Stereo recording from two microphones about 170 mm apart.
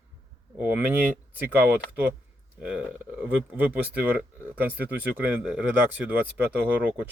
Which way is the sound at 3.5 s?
10° right (ahead or behind).